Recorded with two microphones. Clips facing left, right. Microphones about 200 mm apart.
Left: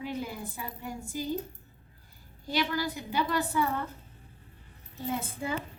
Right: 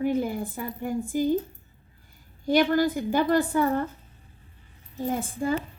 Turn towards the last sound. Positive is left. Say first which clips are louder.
# right 6 dB
turn(degrees=-50)  # may be behind; listen again after turning